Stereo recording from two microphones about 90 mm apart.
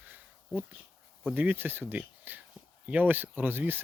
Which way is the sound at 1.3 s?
20° right (ahead or behind).